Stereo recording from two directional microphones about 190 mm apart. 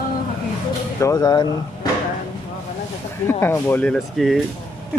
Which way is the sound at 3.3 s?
15° left (ahead or behind).